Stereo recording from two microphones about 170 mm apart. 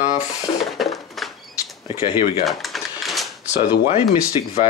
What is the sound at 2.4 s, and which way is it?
Typewriter, centre (ahead or behind).